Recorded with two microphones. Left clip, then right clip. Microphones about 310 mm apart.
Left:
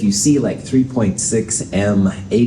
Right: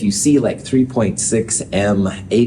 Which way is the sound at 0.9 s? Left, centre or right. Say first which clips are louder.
Right 1 dB; right.